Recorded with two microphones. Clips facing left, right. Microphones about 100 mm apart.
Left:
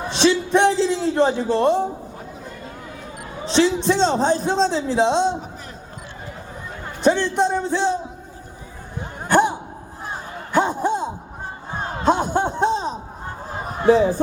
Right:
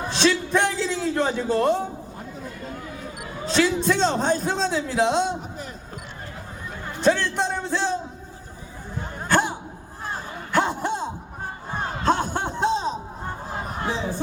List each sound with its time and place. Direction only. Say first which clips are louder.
0.1 s a man's voice: left 4 dB; 20° left (ahead or behind)
3.4 s a man's voice: left 3 dB; 25° left (ahead or behind)
7.0 s a man's voice: left 3 dB; 20° left (ahead or behind)
9.2 s a sound: left 5 dB; 20° left (ahead or behind)